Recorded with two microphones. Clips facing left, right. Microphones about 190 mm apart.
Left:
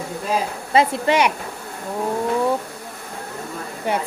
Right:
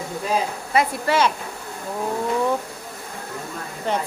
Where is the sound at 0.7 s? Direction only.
25° left (ahead or behind).